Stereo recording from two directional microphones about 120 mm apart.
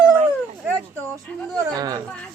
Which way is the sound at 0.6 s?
25° right (ahead or behind).